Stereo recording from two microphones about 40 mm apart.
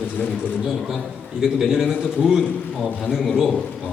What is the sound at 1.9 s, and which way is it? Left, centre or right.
A man's voice, centre.